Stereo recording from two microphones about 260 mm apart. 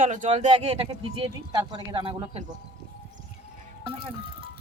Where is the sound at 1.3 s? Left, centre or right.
Centre.